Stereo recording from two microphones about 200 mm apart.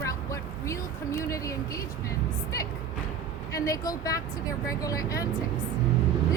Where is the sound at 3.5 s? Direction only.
15° left (ahead or behind).